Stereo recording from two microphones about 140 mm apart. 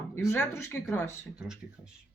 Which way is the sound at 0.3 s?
15° left (ahead or behind).